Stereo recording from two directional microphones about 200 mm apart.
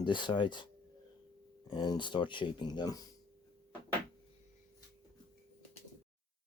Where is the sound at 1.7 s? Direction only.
25° left (ahead or behind).